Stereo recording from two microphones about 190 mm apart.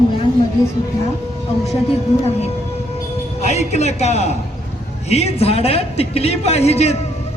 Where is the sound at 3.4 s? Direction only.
35° left (ahead or behind).